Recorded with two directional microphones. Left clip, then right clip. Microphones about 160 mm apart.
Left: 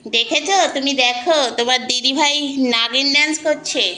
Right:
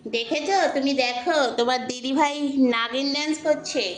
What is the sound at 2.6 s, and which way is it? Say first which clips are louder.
Speech: left 6 dB; 15° right (ahead or behind).